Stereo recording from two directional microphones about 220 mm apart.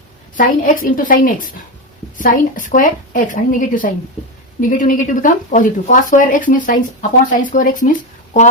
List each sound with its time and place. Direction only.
0.3 s speech: 35° left (ahead or behind)